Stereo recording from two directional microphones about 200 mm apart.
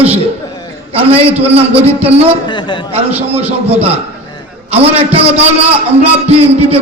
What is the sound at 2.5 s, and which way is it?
Speech, 25° left (ahead or behind).